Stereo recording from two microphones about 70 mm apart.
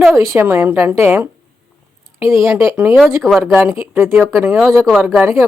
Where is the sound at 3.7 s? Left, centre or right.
Right.